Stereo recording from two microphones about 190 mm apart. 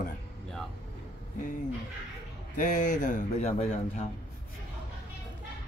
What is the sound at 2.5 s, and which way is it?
Speech, 40° left (ahead or behind).